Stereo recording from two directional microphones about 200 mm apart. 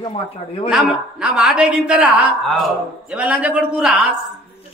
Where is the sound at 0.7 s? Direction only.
5° right (ahead or behind).